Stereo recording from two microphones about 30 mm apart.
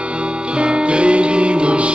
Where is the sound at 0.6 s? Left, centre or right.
Right.